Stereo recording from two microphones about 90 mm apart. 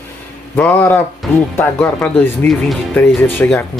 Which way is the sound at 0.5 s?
20° left (ahead or behind).